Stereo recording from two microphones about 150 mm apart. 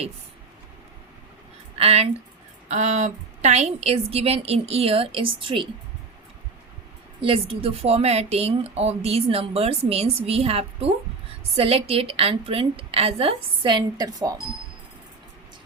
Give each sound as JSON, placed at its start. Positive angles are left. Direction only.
{"t": 1.8, "sound": "a woman's voice", "side_deg": -40}
{"t": 7.2, "sound": "speech", "side_deg": -35}